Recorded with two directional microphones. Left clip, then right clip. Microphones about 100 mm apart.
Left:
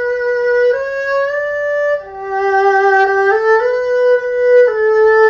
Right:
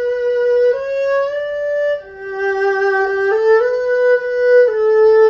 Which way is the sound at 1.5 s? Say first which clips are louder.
Left 2 dB; 35° right (ahead or behind).